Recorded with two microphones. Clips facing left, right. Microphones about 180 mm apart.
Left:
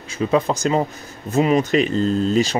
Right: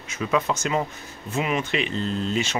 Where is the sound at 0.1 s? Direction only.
30° left (ahead or behind).